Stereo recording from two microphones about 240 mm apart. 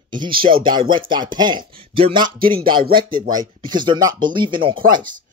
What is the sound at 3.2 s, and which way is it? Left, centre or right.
Speech, centre.